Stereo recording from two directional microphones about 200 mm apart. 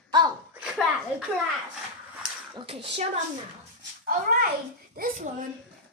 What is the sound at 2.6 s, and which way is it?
Speech, 25° right (ahead or behind).